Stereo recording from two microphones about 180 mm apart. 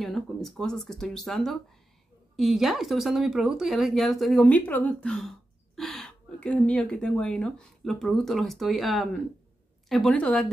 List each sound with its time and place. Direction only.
0.0 s speech: centre (ahead or behind)